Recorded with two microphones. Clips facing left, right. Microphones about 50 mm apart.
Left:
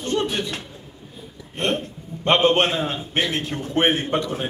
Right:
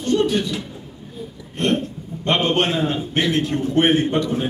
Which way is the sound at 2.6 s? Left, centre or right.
Centre.